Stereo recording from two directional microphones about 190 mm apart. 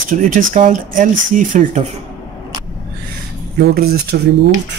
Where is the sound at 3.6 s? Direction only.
60° right (ahead or behind).